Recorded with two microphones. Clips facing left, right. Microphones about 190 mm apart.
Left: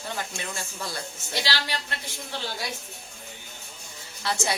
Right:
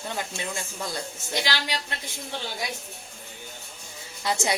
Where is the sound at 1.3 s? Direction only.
15° right (ahead or behind).